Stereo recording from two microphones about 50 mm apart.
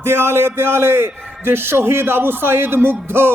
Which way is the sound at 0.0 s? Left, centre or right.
Right.